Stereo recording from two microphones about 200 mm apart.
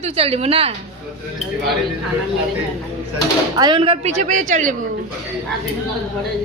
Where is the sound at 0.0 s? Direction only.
30° right (ahead or behind).